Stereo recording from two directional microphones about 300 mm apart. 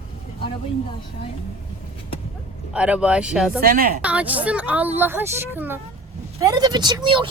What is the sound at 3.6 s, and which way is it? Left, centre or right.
Speech, right.